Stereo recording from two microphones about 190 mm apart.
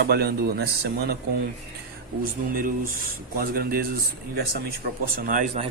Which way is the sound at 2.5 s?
50° right (ahead or behind).